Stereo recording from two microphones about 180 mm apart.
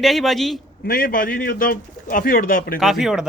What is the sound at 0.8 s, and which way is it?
Speech, 55° left (ahead or behind).